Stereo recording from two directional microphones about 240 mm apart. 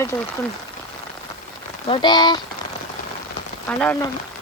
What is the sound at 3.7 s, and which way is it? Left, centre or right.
Speech, centre.